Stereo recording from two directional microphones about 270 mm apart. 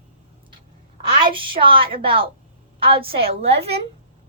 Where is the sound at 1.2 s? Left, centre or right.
Centre.